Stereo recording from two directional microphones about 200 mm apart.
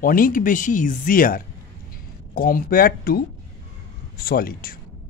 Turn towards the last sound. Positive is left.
turn(degrees=45)  # may be behind; listen again after turning